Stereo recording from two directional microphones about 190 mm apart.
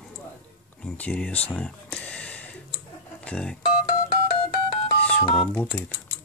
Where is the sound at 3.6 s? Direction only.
25° left (ahead or behind).